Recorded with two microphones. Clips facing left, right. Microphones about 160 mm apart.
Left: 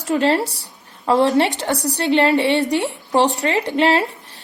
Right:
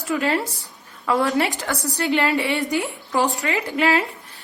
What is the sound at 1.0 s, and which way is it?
A woman's voice, 25° left (ahead or behind).